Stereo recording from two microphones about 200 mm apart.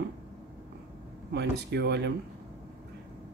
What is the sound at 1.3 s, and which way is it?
Speech, 55° right (ahead or behind).